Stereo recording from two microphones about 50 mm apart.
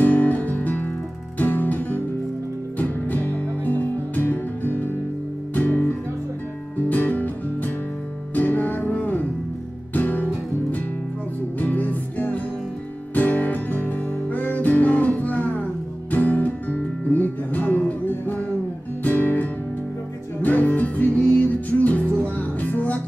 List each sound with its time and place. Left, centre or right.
0.0 s music: left
1.4 s guitar: left
2.8 s music: left
11.6 s music: left
20.4 s music: left